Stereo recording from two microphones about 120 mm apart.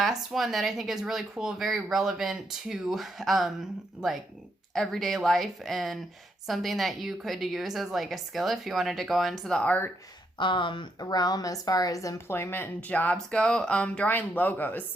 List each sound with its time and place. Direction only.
0.0 s speech: centre (ahead or behind)
4.7 s speech: 5° left (ahead or behind)
10.3 s a woman's voice: 40° left (ahead or behind); by 14.8 s 15° left (ahead or behind)